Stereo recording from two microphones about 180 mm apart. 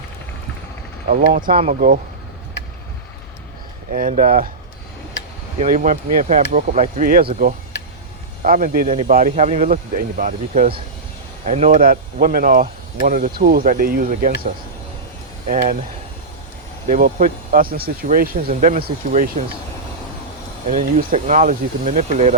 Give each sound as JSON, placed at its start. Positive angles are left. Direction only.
{"t": 1.1, "sound": "speech", "side_deg": -50}
{"t": 3.9, "sound": "speech", "side_deg": -45}
{"t": 5.5, "sound": "speech", "side_deg": -45}
{"t": 8.4, "sound": "speech", "side_deg": -50}
{"t": 11.8, "sound": "speech", "side_deg": -55}
{"t": 15.4, "sound": "speech", "side_deg": -45}
{"t": 16.9, "sound": "speech", "side_deg": -45}
{"t": 20.7, "sound": "speech", "side_deg": -50}